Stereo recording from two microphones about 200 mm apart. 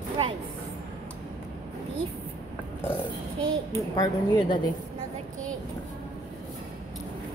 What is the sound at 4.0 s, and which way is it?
Speech, 20° left (ahead or behind).